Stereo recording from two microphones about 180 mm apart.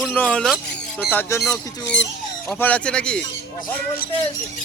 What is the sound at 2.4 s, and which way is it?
Speech, 10° left (ahead or behind).